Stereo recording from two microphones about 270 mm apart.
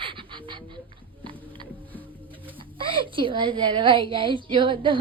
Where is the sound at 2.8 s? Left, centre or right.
Centre.